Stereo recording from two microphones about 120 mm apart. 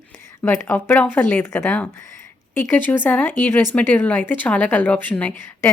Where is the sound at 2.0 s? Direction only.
25° left (ahead or behind).